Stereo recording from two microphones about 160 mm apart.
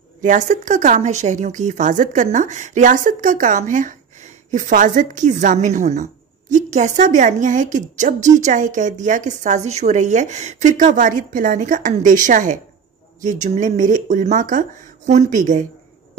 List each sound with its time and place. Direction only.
0.2 s a woman's voice: 50° right (ahead or behind)